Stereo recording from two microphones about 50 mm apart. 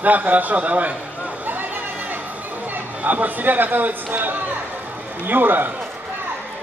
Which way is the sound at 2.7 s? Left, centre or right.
Right.